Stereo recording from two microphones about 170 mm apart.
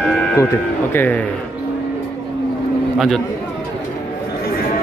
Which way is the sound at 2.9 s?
Centre (ahead or behind).